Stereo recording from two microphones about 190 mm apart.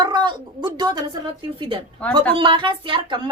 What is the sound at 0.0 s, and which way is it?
A woman's voice, 25° right (ahead or behind).